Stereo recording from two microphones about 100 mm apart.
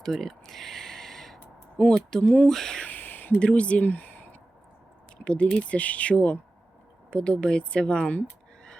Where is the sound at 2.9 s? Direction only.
20° left (ahead or behind).